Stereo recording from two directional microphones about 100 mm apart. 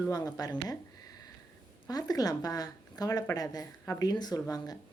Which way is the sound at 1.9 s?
40° left (ahead or behind).